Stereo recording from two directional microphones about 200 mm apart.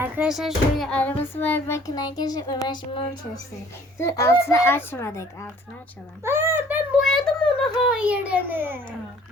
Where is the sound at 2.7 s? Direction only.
25° left (ahead or behind).